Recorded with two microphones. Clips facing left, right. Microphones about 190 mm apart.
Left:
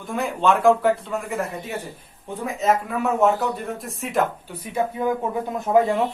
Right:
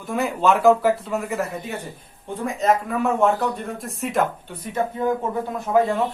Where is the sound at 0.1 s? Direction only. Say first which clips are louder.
Right 1 dB; centre (ahead or behind); by 6.0 s 20° left (ahead or behind).